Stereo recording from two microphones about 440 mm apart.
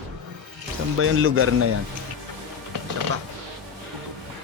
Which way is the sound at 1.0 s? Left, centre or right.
Right.